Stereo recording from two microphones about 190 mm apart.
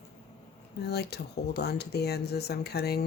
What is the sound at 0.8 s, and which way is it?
Speech, 60° left (ahead or behind).